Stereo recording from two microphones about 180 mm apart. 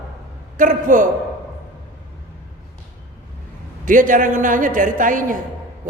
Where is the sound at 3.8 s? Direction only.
45° right (ahead or behind).